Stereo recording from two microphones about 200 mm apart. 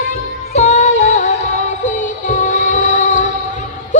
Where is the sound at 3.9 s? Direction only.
40° left (ahead or behind).